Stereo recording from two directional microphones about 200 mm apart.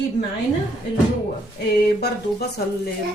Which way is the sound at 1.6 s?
55° left (ahead or behind).